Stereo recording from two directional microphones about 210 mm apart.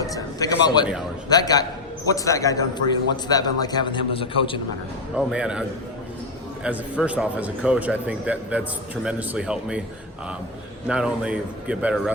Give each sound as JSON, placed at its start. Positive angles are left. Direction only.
{"t": 0.0, "sound": "a man's voice", "side_deg": 15}
{"t": 5.1, "sound": "a man's voice", "side_deg": -5}
{"t": 6.7, "sound": "a man's voice", "side_deg": -5}
{"t": 10.8, "sound": "a man's voice", "side_deg": -5}